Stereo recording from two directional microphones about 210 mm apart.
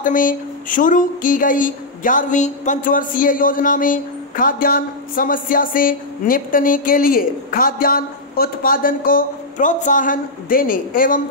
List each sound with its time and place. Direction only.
0.0 s speech: 40° left (ahead or behind)